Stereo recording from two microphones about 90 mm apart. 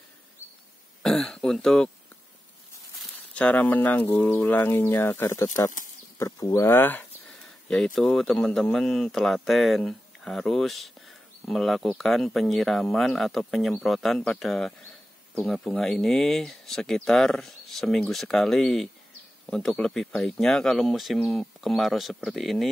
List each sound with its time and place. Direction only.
1.0 s speech: 5° left (ahead or behind)
3.3 s speech: 15° left (ahead or behind)
7.6 s speech: 10° left (ahead or behind)